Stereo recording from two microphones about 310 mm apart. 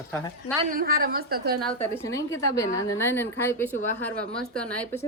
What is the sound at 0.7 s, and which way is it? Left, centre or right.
Speech, right.